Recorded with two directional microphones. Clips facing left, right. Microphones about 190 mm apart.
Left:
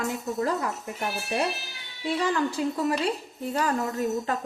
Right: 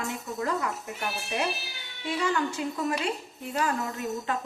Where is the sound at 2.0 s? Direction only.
35° left (ahead or behind).